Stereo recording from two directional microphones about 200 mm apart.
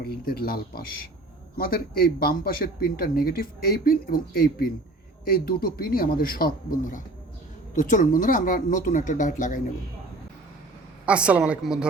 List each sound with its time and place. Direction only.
0.0 s speech: 50° left (ahead or behind)
11.0 s a woman's voice: 5° right (ahead or behind)